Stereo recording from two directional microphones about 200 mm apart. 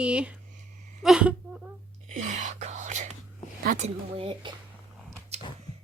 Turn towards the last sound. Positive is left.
turn(degrees=-25)  # may be behind; listen again after turning